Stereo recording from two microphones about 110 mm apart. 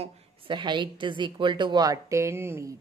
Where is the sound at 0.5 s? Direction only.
45° right (ahead or behind).